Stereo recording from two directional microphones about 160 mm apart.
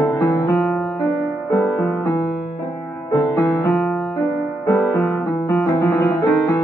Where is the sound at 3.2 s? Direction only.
20° left (ahead or behind).